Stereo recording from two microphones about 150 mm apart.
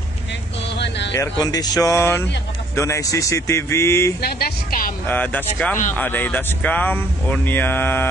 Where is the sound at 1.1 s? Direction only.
25° left (ahead or behind).